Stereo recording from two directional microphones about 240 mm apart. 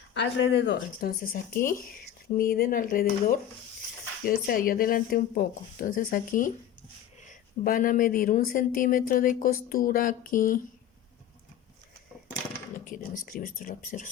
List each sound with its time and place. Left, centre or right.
0.1 s speech: left
12.9 s speech: left